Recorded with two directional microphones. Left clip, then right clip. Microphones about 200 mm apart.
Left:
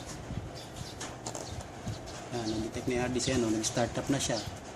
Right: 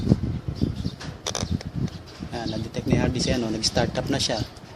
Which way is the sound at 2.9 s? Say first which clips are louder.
Right 6 dB; 45° right (ahead or behind).